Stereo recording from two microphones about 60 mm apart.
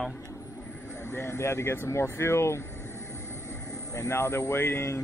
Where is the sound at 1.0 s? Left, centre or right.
Left.